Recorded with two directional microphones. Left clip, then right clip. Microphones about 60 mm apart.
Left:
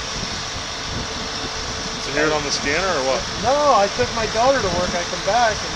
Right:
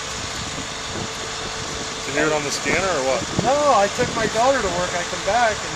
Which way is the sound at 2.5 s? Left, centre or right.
Right.